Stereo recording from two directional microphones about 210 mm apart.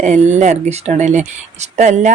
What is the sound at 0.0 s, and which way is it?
A woman's voice, 35° right (ahead or behind).